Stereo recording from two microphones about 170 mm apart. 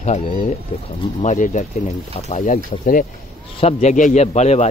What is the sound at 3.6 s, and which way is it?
A man's voice, 40° left (ahead or behind).